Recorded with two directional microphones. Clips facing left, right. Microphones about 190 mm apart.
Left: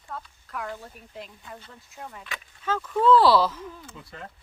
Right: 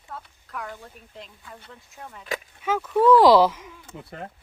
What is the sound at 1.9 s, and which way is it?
Speech, 5° left (ahead or behind).